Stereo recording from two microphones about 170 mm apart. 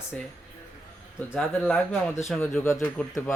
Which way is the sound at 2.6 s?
15° left (ahead or behind).